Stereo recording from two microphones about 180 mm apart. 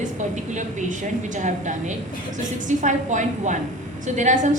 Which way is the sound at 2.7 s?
45° right (ahead or behind).